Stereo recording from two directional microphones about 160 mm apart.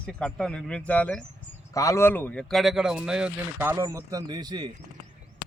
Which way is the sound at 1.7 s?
20° left (ahead or behind).